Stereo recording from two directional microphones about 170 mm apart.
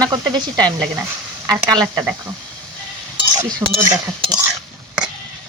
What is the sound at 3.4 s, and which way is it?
Speech, 25° right (ahead or behind).